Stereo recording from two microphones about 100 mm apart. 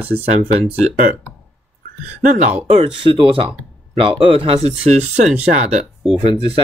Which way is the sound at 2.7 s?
65° right (ahead or behind).